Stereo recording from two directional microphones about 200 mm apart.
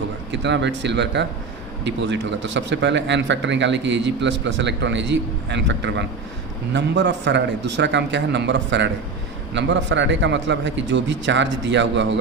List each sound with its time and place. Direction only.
0.3 s a man's voice: 60° right (ahead or behind)